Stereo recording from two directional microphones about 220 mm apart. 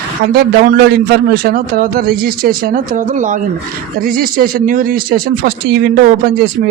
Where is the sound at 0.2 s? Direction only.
45° right (ahead or behind).